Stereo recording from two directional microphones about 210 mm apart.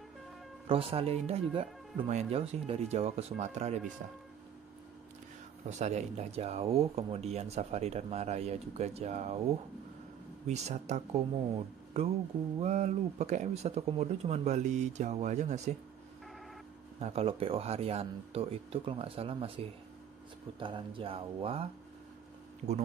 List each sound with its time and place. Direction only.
0.7 s speech: 25° right (ahead or behind)
5.7 s speech: 35° right (ahead or behind)
10.4 s speech: 30° right (ahead or behind)
12.5 s speech: 35° right (ahead or behind)
17.0 s speech: 30° right (ahead or behind)